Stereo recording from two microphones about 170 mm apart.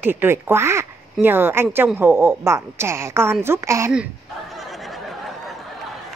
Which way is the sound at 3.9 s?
Centre (ahead or behind).